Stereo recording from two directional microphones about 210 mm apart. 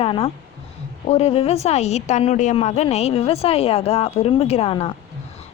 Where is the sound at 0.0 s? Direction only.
25° left (ahead or behind).